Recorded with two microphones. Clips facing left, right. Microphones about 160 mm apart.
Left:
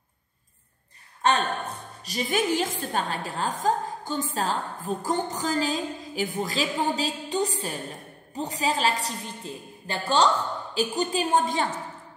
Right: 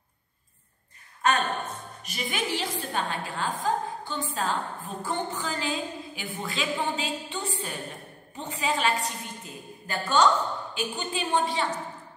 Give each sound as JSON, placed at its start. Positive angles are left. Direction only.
{"t": 1.2, "sound": "a woman's voice", "side_deg": 30}